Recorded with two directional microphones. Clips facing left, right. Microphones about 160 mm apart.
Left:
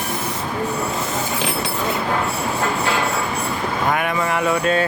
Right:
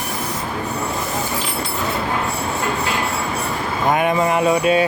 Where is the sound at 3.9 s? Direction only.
25° right (ahead or behind).